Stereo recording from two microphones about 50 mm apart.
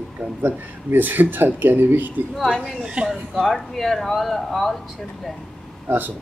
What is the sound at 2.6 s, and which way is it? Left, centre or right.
Speech, centre.